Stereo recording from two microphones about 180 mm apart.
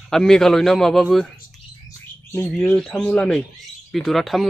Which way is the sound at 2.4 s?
5° left (ahead or behind).